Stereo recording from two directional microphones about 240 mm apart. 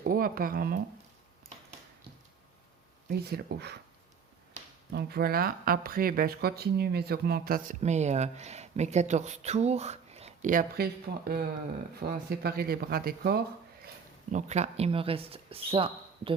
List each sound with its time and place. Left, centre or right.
0.0 s speech: right
3.1 s speech: right
4.6 s a sound: right
4.9 s speech: right
14.3 s speech: right